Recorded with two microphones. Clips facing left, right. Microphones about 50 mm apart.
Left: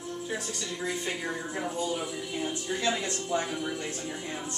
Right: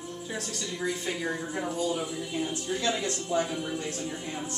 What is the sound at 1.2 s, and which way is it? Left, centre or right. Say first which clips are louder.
Speech: right 1 dB; centre.